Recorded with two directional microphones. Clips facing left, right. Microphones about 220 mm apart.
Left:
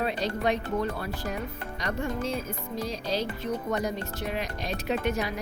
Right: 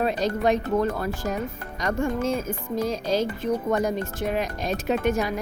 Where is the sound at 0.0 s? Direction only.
45° right (ahead or behind).